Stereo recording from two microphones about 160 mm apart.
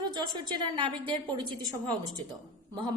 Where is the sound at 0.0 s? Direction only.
30° right (ahead or behind).